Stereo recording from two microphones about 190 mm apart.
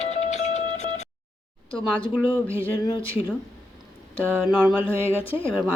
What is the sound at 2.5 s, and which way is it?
Speech, 30° left (ahead or behind).